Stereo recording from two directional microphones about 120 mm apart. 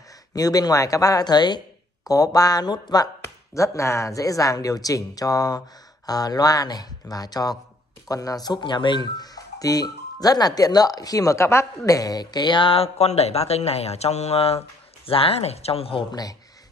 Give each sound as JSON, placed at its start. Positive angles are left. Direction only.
{"t": 0.3, "sound": "speech", "side_deg": 30}
{"t": 16.1, "sound": "speech", "side_deg": 30}